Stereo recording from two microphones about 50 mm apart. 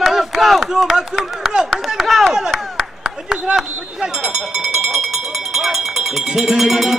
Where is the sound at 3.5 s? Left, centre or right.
Centre.